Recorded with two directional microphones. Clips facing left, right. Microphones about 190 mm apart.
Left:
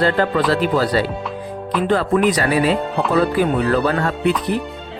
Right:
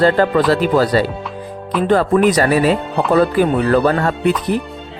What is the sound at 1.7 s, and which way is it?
Music, centre (ahead or behind).